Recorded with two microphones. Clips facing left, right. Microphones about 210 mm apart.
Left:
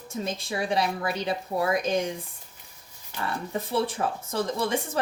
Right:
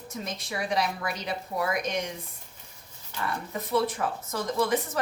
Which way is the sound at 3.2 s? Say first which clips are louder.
Left 2 dB; 30° left (ahead or behind).